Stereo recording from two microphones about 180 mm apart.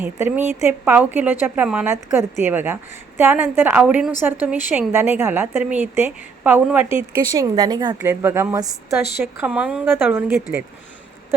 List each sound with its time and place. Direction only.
0.0 s a woman's voice: 10° right (ahead or behind)
6.8 s speech: 30° left (ahead or behind)
7.3 s a woman's voice: 20° right (ahead or behind)
8.0 s a woman's voice: 10° right (ahead or behind)
9.2 s a woman's voice: 5° right (ahead or behind)